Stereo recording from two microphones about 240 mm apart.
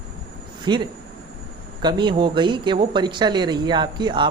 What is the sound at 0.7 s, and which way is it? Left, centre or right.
Speech, centre.